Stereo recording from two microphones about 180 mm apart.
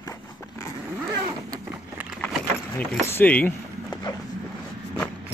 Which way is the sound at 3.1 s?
10° left (ahead or behind).